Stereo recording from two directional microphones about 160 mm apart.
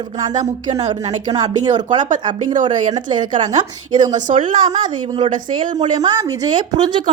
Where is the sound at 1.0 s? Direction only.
45° right (ahead or behind).